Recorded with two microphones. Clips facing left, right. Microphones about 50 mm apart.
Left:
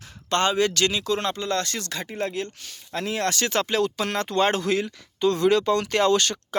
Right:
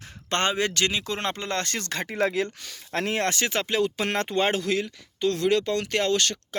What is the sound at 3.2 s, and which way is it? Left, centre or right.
Speech, right.